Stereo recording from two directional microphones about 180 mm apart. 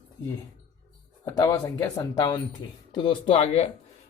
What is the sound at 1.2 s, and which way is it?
Speech, 20° left (ahead or behind).